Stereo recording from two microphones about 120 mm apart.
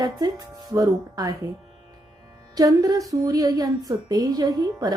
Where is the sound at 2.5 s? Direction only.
30° right (ahead or behind).